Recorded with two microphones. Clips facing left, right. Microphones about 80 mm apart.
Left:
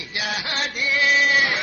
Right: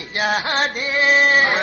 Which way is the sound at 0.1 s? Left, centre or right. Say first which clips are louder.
Right 8 dB; right.